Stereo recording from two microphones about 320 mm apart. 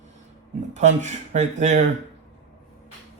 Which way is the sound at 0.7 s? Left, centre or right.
Right.